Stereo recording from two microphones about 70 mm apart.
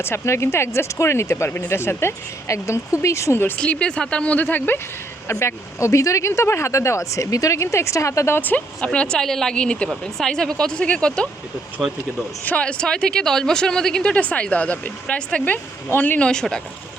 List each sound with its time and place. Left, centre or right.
0.0 s speech: left
3.6 s a woman's voice: centre
4.4 s speech: left
5.3 s speech: left
8.4 s speech: left
8.8 s a woman's voice: centre
12.5 s a woman's voice: centre
16.2 s a woman's voice: centre